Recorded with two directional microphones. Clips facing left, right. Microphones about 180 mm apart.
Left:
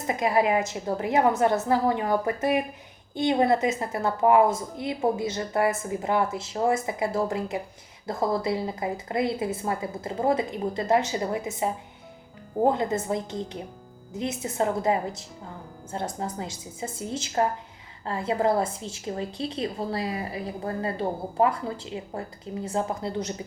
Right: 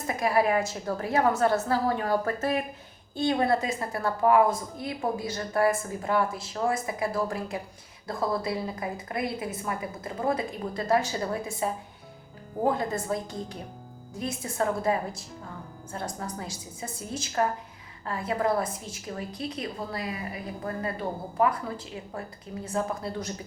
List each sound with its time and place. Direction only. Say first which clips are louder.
0.1 s a woman's voice: left 2 dB; 20° left (ahead or behind)